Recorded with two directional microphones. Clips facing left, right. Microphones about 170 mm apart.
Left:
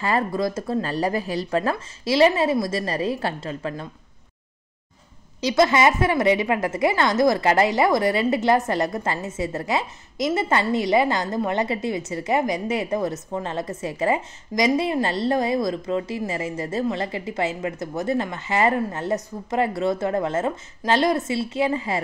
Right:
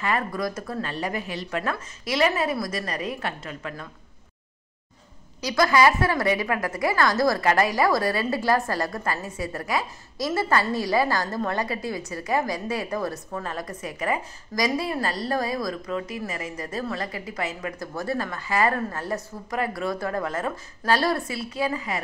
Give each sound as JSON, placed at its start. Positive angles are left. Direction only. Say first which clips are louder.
{"t": 0.0, "sound": "speech", "louder": "left 4 dB", "side_deg": 30}
{"t": 5.4, "sound": "a woman's voice", "louder": "left 2 dB", "side_deg": 25}